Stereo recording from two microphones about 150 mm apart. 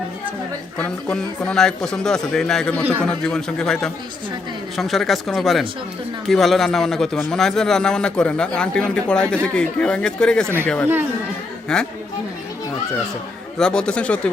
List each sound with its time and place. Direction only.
0.8 s a man's voice: 5° left (ahead or behind)
11.7 s a man's voice: 5° left (ahead or behind)
13.6 s a man's voice: 5° left (ahead or behind)